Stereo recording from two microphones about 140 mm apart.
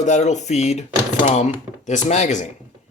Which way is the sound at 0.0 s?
55° left (ahead or behind).